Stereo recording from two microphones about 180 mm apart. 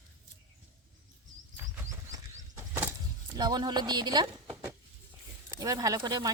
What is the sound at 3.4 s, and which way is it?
Speech, 20° right (ahead or behind).